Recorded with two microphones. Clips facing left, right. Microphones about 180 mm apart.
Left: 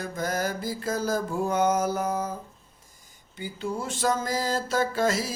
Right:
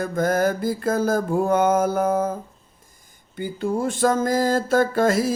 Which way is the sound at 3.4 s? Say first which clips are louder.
Right 8 dB; 50° right (ahead or behind).